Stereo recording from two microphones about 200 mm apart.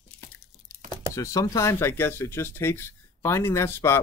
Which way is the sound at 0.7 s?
15° right (ahead or behind).